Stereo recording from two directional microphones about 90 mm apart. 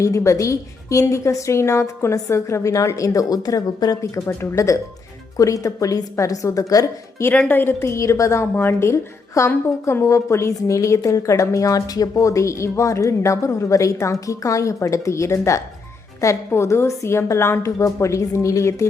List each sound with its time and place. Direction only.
0.0 s a woman's voice: 35° left (ahead or behind)
7.3 s a woman's voice: 20° left (ahead or behind)